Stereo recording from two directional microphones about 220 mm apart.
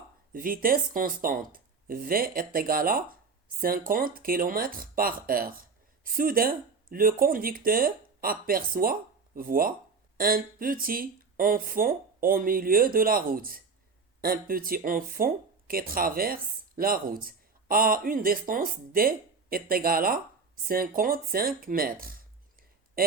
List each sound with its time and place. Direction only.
0.3 s speech: 40° right (ahead or behind)